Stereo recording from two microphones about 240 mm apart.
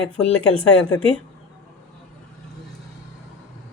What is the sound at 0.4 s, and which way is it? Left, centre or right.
Speech, left.